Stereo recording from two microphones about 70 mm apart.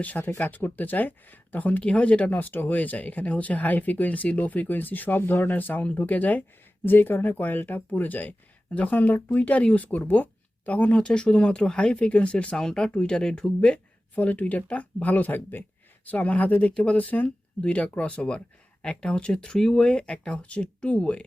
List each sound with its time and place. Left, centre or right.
0.0 s speech: left